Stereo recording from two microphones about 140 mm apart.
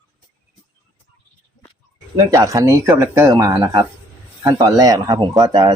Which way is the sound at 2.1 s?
25° right (ahead or behind).